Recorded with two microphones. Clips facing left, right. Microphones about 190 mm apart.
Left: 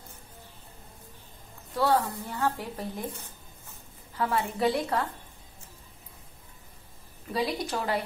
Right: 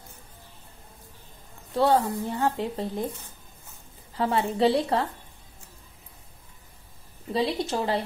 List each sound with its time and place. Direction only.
1.8 s speech: 25° right (ahead or behind)
4.2 s speech: 25° right (ahead or behind)
7.3 s speech: 25° right (ahead or behind)